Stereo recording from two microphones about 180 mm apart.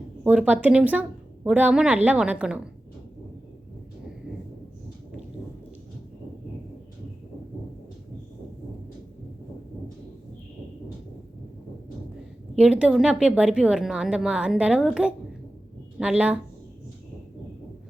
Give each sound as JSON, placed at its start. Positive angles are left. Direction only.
{"t": 0.3, "sound": "a woman's voice", "side_deg": -10}
{"t": 12.5, "sound": "a woman's voice", "side_deg": -5}